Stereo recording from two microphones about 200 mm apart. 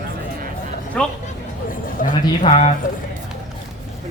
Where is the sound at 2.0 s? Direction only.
45° left (ahead or behind).